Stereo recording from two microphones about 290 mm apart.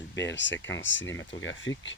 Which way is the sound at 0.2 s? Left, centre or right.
Left.